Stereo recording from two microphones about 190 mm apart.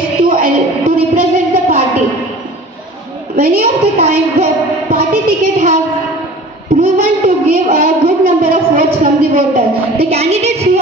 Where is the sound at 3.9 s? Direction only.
30° right (ahead or behind).